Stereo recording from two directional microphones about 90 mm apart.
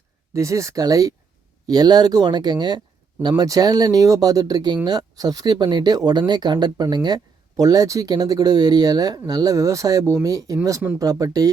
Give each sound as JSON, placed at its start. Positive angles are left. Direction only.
{"t": 0.3, "sound": "speech", "side_deg": -35}
{"t": 3.2, "sound": "speech", "side_deg": -45}
{"t": 7.5, "sound": "speech", "side_deg": -40}